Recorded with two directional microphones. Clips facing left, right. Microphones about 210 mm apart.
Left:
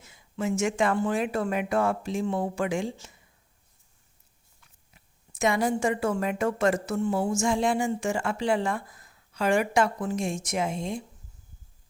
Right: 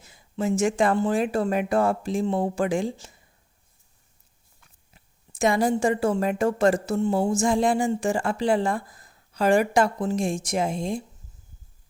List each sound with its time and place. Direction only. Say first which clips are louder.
0.0 s a woman's voice: right 3 dB; 35° right (ahead or behind)
4.9 s a woman's voice: right 4 dB; 35° right (ahead or behind)